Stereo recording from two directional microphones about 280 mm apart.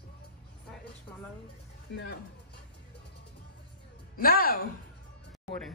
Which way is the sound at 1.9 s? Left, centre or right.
Left.